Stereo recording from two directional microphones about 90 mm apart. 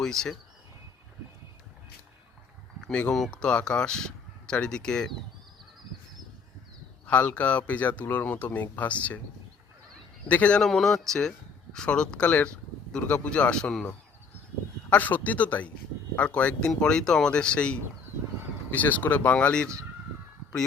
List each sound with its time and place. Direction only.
0.0 s speech: 5° left (ahead or behind)
2.8 s speech: 10° left (ahead or behind)
7.1 s speech: 15° left (ahead or behind)
10.2 s speech: 15° left (ahead or behind)
10.6 s speech: 5° left (ahead or behind)